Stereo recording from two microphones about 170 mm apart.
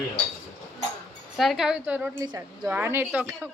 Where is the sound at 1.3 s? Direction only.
Centre (ahead or behind).